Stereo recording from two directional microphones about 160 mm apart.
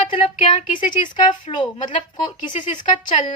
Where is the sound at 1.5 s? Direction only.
30° left (ahead or behind).